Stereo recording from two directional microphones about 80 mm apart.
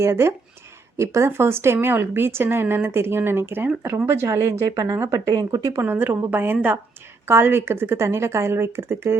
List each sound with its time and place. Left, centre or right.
0.0 s a woman's voice: right
5.3 s speech: right
5.7 s a woman's voice: right